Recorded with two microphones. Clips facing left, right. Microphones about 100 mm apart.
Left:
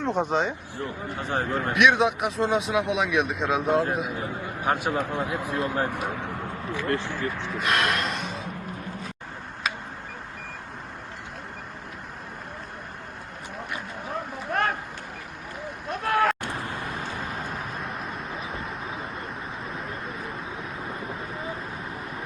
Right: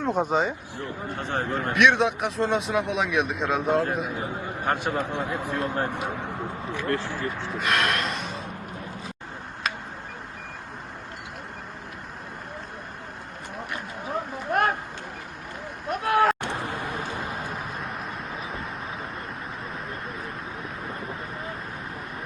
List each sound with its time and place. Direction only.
0.0 s speech: 5° right (ahead or behind)
1.1 s a man's voice: 10° left (ahead or behind)
1.7 s a man's voice: centre (ahead or behind)
6.1 s a sound: centre (ahead or behind)
7.1 s speech: 15° right (ahead or behind)
7.5 s gasp: centre (ahead or behind)
13.7 s boat: 5° right (ahead or behind)
15.9 s a sound: 5° right (ahead or behind)
16.4 s vehicle: 25° right (ahead or behind)
17.3 s vehicle: 5° right (ahead or behind)